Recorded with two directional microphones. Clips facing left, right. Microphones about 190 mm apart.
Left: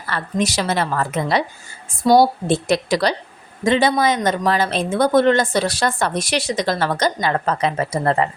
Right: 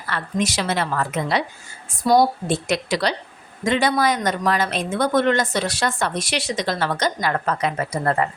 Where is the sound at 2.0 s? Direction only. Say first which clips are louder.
Left 3 dB; 25° left (ahead or behind).